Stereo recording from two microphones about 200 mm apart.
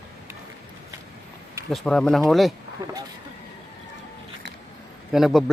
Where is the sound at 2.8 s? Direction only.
15° right (ahead or behind).